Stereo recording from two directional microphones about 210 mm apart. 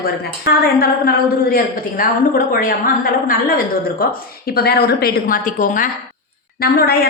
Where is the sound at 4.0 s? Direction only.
45° left (ahead or behind).